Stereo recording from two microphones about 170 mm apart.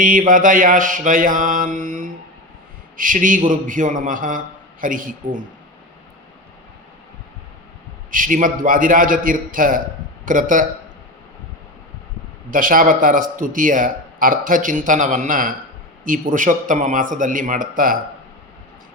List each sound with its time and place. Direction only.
0.0 s a man's voice: 55° right (ahead or behind)
8.1 s a man's voice: 50° right (ahead or behind)
12.5 s a man's voice: 55° right (ahead or behind)